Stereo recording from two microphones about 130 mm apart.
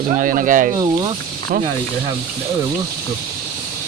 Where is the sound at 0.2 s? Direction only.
90° right.